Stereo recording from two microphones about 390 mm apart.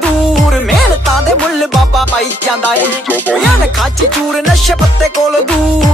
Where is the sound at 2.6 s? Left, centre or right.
Left.